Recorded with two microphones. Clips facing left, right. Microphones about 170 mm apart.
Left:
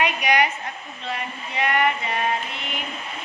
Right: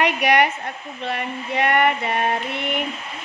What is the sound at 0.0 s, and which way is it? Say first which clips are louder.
Speech: right 3 dB; 65° right (ahead or behind).